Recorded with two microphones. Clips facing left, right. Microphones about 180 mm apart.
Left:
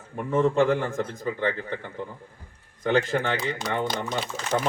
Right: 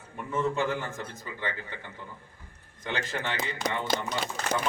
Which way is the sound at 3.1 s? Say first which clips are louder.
Left 8 dB; 40° left (ahead or behind).